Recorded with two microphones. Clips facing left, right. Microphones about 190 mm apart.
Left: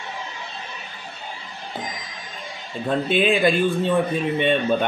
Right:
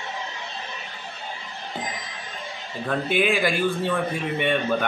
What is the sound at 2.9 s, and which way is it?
Speech, 25° left (ahead or behind).